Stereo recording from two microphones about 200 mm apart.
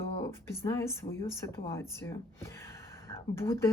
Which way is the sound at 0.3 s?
15° left (ahead or behind).